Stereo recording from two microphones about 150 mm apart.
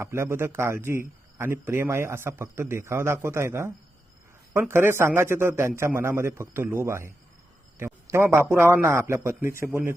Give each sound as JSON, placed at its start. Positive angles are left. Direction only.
{"t": 0.0, "sound": "a man's voice", "side_deg": -15}
{"t": 4.7, "sound": "a man's voice", "side_deg": -15}